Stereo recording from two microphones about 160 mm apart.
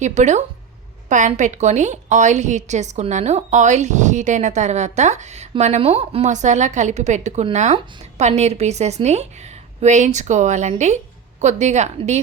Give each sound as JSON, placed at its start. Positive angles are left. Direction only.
{"t": 0.0, "sound": "a woman's voice", "side_deg": -45}